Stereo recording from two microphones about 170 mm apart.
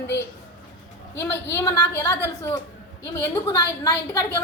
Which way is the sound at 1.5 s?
20° left (ahead or behind).